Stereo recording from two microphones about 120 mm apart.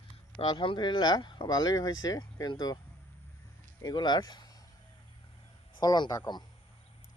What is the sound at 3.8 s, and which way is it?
Speech, 40° left (ahead or behind).